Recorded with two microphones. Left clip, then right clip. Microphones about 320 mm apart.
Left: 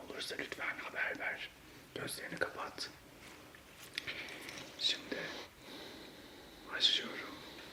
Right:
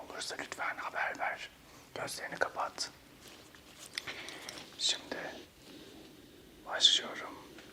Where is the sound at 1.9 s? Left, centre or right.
Right.